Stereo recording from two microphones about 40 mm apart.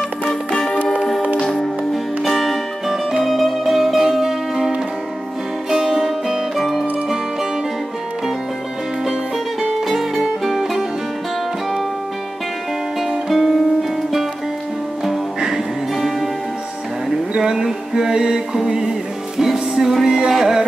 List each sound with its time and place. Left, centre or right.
0.2 s music: left
1.4 s music: centre
2.9 s music: centre
6.5 s music: centre
9.6 s music: centre
13.3 s music: centre
15.0 s music: centre
17.4 s a sound: centre
18.7 s music: centre